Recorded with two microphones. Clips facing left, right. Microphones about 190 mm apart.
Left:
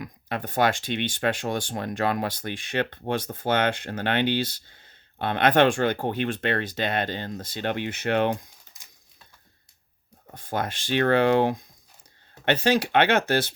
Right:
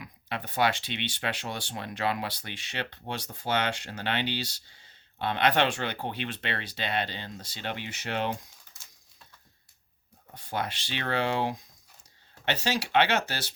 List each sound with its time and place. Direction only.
0.0 s speech: 45° left (ahead or behind)
8.7 s a sound: 15° left (ahead or behind)
10.3 s speech: 50° left (ahead or behind)